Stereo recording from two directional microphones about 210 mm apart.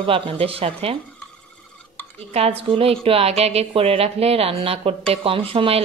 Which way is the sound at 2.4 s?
30° right (ahead or behind).